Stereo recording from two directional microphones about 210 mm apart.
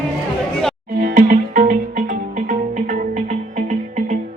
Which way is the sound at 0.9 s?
40° right (ahead or behind).